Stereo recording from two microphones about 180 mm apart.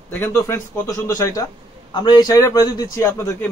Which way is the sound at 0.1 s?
10° left (ahead or behind).